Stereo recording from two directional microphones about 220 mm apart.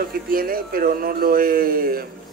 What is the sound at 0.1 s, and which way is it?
Speech, 40° right (ahead or behind).